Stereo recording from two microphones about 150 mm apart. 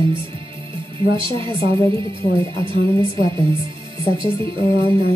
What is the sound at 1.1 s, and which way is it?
Speech, 35° right (ahead or behind).